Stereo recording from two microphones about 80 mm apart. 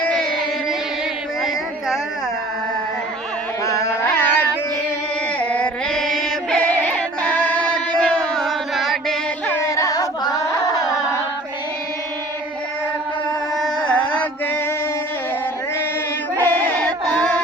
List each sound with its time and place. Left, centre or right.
0.0 s carnatic music: centre
3.6 s carnatic music: left
5.4 s music: centre
6.7 s music: centre
8.4 s music: centre
9.5 s carnatic music: left
13.6 s a sound: centre
16.4 s chant: centre